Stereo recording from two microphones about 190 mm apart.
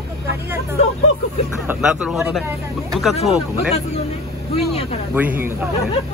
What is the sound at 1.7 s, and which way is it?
Speech, 5° right (ahead or behind).